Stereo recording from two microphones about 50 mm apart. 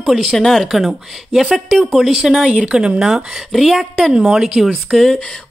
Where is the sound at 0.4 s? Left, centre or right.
Centre.